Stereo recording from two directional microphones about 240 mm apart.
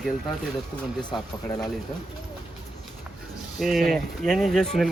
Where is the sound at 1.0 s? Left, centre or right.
Centre.